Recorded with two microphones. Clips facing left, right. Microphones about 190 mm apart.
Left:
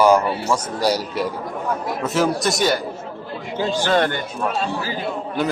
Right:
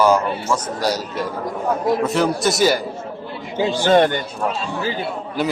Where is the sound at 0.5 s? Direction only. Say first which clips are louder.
Left 1 dB; 10° left (ahead or behind).